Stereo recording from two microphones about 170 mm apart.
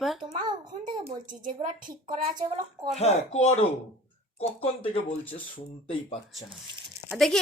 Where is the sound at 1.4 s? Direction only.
50° right (ahead or behind).